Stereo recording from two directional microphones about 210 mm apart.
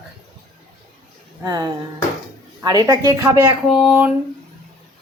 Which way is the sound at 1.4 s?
15° right (ahead or behind).